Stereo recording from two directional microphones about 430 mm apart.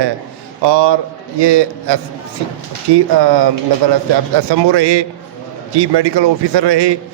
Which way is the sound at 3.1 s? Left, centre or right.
Right.